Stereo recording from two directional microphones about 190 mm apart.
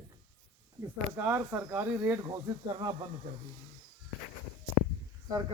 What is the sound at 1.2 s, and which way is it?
A man's voice, 10° right (ahead or behind).